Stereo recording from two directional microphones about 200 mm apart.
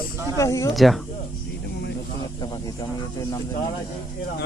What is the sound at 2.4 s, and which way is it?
Speech, 20° left (ahead or behind).